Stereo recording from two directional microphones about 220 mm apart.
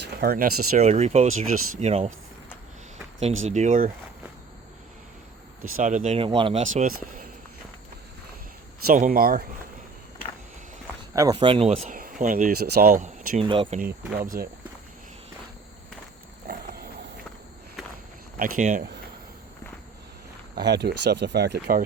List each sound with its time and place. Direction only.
0.0 s speech: 45° right (ahead or behind)
0.7 s speech: 35° right (ahead or behind)
1.3 s speech: 70° right (ahead or behind)
1.8 s speech: 30° right (ahead or behind)
3.4 s speech: 35° right (ahead or behind)
5.7 s speech: 35° right (ahead or behind)
8.9 s speech: 40° right (ahead or behind)
11.1 s speech: 15° right (ahead or behind)
11.3 s speech: 25° right (ahead or behind)
13.4 s speech: 25° right (ahead or behind)
14.2 s speech: 40° right (ahead or behind)
16.5 s a sound: 45° right (ahead or behind)
18.3 s speech: 40° right (ahead or behind)
20.6 s speech: 50° right (ahead or behind)